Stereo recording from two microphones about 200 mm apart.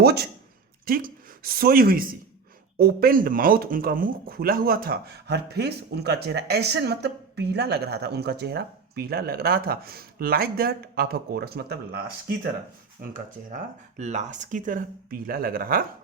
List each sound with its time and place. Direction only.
0.0 s speech: 50° right (ahead or behind)
13.0 s speech: 40° right (ahead or behind)